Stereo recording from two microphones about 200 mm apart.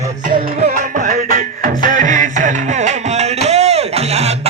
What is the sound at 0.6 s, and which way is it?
Music, 40° right (ahead or behind).